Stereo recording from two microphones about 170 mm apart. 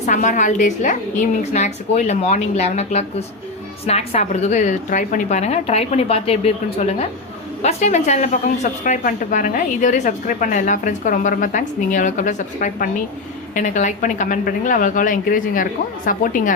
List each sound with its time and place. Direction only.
0.0 s a woman's voice: 45° left (ahead or behind)